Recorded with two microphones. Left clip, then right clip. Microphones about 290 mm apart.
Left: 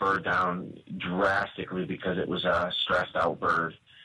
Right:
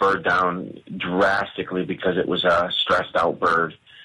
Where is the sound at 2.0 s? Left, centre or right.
Centre.